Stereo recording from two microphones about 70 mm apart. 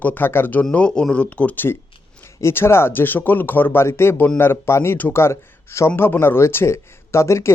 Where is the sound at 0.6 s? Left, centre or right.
Centre.